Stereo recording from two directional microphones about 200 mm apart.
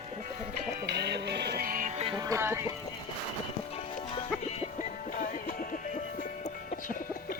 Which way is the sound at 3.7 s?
30° left (ahead or behind).